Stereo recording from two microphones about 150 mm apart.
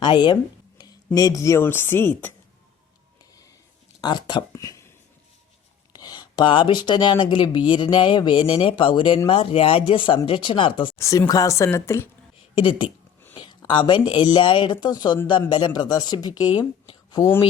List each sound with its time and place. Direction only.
0.0 s speech: 30° left (ahead or behind); by 2.3 s 15° left (ahead or behind)
4.0 s speech: 30° left (ahead or behind)
5.9 s speech: 25° left (ahead or behind)
10.9 s speech: 20° left (ahead or behind)
12.5 s speech: 35° left (ahead or behind)